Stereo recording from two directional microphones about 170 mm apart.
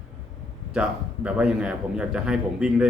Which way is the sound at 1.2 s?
5° right (ahead or behind).